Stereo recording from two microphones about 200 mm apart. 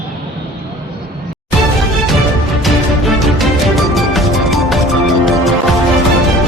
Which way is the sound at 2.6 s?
Centre (ahead or behind).